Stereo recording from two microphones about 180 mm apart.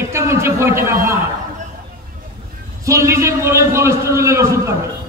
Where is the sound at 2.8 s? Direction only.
15° right (ahead or behind).